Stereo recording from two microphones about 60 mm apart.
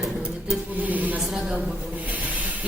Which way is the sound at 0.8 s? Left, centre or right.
Right.